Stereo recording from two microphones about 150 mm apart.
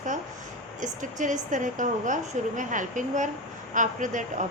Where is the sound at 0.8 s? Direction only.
55° right (ahead or behind).